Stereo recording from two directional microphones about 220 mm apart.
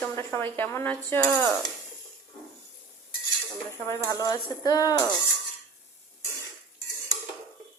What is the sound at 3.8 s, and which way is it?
Speech, 15° left (ahead or behind).